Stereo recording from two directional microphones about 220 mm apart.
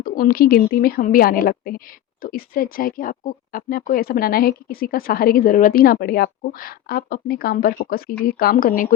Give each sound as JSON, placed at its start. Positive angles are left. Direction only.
{"t": 0.0, "sound": "speech", "side_deg": 40}